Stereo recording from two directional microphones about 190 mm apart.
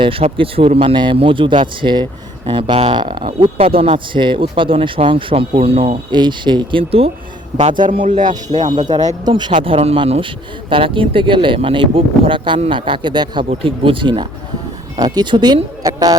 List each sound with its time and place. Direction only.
0.0 s speech: 30° right (ahead or behind)
9.0 s speech: 20° right (ahead or behind)
13.4 s speech: 35° right (ahead or behind)